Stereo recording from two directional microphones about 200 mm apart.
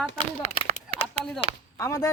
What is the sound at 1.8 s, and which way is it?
Speech, 15° left (ahead or behind).